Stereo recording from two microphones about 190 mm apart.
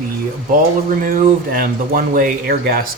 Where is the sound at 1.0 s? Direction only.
45° right (ahead or behind).